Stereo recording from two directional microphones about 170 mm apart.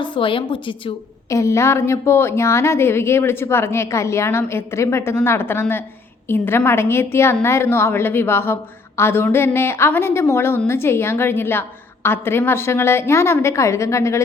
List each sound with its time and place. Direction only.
0.0 s a woman's voice: 30° left (ahead or behind)
1.3 s a woman's voice: 15° left (ahead or behind)